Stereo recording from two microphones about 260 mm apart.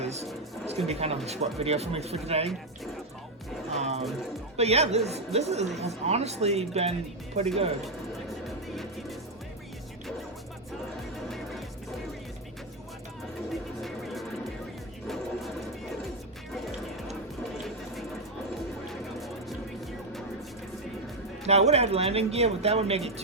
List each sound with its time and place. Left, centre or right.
0.0 s music: right
0.9 s speech: right
3.8 s speech: right
8.4 s music: centre
13.5 s music: centre
18.9 s music: centre
21.4 s speech: right